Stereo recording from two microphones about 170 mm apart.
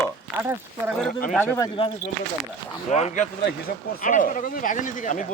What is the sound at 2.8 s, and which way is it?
Speech, 40° left (ahead or behind).